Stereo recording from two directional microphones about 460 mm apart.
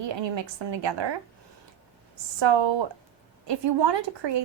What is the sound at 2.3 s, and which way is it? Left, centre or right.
Speech, right.